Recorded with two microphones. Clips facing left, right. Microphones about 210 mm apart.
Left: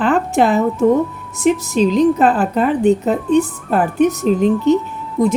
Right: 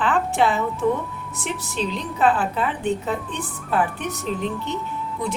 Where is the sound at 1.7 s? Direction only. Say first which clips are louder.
Left 13 dB; 40° left (ahead or behind).